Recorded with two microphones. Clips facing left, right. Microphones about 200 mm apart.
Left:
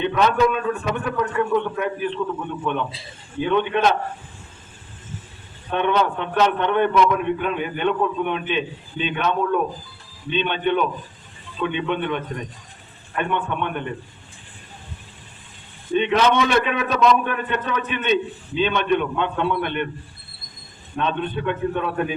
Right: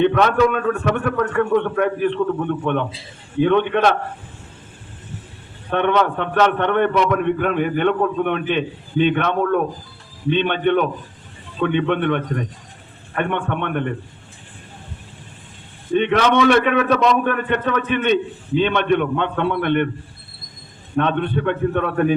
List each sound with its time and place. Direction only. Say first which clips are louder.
0.0 s a man's voice: right 3 dB; 60° right (ahead or behind)
5.7 s a man's voice: right 3 dB; 60° right (ahead or behind)
16.0 s a man's voice: right 2 dB; 60° right (ahead or behind)
20.9 s a man's voice: right 5 dB; 60° right (ahead or behind)